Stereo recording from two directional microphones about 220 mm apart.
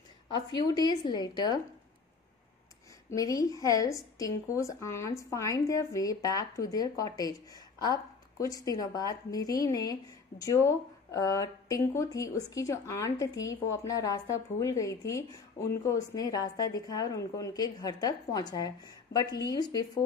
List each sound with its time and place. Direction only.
0.3 s a woman's voice: 20° left (ahead or behind)
3.1 s speech: 15° left (ahead or behind)
19.1 s a woman's voice: 50° left (ahead or behind)
19.4 s speech: 20° left (ahead or behind)